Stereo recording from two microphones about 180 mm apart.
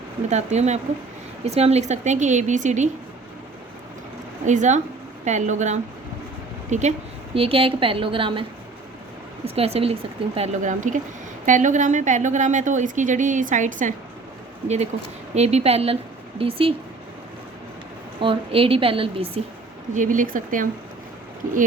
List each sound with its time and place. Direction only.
0.3 s speech: 40° right (ahead or behind)
4.4 s a woman's voice: 40° right (ahead or behind)
9.6 s a woman's voice: 35° right (ahead or behind)
15.4 s speech: 35° right (ahead or behind)
18.2 s speech: 30° right (ahead or behind)
19.9 s a woman's voice: 45° right (ahead or behind)